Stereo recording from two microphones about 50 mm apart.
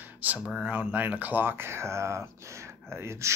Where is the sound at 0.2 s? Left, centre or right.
Right.